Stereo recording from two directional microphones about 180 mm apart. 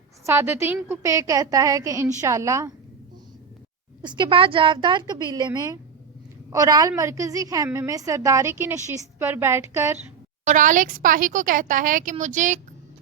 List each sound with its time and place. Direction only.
0.3 s a woman's voice: 15° right (ahead or behind)
4.0 s a woman's voice: 25° right (ahead or behind)
10.4 s speech: 45° right (ahead or behind)